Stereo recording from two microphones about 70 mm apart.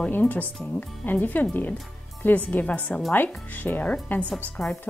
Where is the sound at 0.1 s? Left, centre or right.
Left.